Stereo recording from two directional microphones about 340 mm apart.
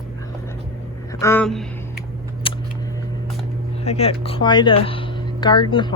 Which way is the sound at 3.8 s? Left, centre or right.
Centre.